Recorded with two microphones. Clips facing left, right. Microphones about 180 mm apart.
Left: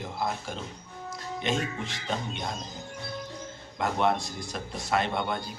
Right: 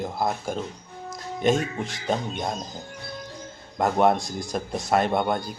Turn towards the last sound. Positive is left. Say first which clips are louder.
# right 6 dB
turn(degrees=-45)  # may be behind; listen again after turning